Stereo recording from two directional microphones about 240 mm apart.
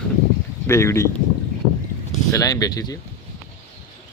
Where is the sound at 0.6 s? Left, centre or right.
Centre.